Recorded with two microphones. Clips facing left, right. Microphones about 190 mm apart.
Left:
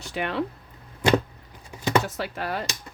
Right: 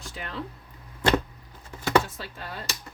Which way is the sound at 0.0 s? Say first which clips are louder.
Left 9 dB; 70° left (ahead or behind).